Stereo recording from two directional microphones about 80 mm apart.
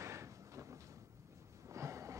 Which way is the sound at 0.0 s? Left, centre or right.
Right.